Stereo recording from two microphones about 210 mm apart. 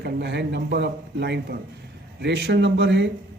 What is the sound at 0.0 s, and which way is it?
A man's voice, 55° right (ahead or behind).